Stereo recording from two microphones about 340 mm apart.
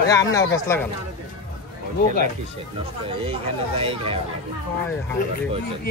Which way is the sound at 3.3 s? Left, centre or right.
Centre.